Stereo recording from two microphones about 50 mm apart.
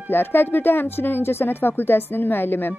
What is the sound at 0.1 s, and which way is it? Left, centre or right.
A woman's voice, left.